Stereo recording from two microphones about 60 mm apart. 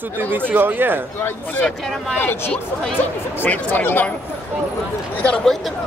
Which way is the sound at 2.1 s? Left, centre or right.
Left.